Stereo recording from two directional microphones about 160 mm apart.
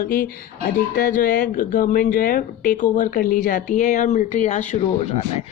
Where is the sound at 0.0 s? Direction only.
60° left (ahead or behind).